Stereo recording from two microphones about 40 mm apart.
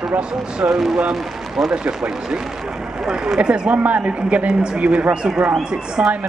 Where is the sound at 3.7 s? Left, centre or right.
Right.